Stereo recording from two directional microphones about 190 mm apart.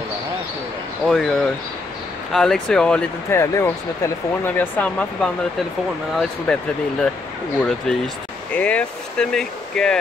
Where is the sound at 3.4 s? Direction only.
15° left (ahead or behind).